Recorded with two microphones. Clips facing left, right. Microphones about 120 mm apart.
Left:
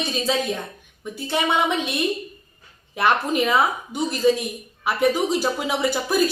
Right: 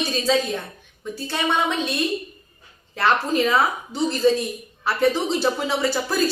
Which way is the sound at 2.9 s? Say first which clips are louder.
Even; 15° left (ahead or behind).